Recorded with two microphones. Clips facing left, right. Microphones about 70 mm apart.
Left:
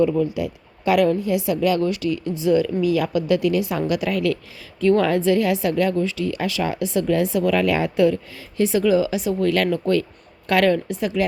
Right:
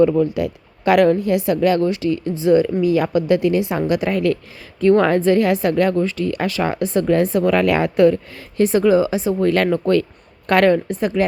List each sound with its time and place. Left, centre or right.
0.1 s a woman's voice: right